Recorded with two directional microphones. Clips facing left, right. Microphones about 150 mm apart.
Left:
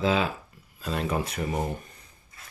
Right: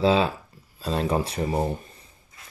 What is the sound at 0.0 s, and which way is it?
Speech, 30° right (ahead or behind).